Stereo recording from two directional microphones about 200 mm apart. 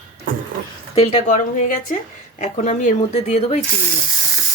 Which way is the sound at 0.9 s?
30° left (ahead or behind).